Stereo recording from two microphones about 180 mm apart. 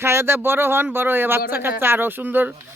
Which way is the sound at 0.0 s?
15° right (ahead or behind).